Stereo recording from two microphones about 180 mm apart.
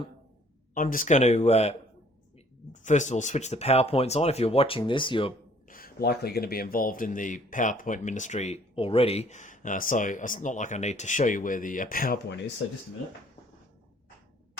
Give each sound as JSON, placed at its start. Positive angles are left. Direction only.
{"t": 0.7, "sound": "speech", "side_deg": 50}
{"t": 2.8, "sound": "speech", "side_deg": 40}
{"t": 5.6, "sound": "speech", "side_deg": 50}